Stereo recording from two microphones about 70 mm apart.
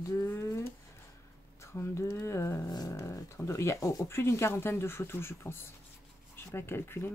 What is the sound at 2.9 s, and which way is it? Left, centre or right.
Speech, left.